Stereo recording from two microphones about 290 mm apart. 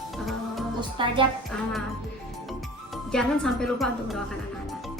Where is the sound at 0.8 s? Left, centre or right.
Centre.